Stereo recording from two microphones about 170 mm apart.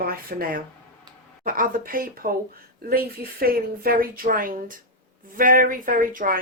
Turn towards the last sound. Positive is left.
turn(degrees=-55)  # may be behind; listen again after turning